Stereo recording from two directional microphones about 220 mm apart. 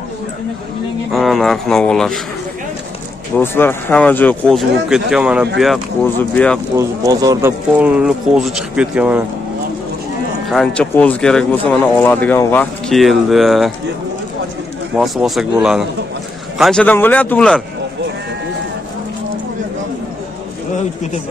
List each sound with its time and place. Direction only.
1.1 s speech: centre (ahead or behind)
3.3 s speech: 10° left (ahead or behind)
6.1 s speech: 5° left (ahead or behind)
6.8 s speech: 15° right (ahead or behind)
7.8 s speech: 5° right (ahead or behind)
10.5 s speech: 5° left (ahead or behind)
15.0 s speech: centre (ahead or behind)